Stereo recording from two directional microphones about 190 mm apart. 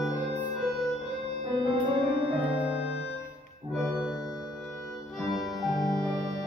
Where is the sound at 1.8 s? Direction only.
30° right (ahead or behind).